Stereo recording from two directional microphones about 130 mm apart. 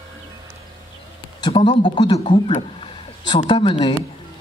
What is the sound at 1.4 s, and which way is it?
A woman's voice, 40° left (ahead or behind).